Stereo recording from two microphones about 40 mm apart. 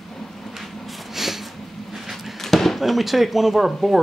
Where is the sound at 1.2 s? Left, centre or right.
Centre.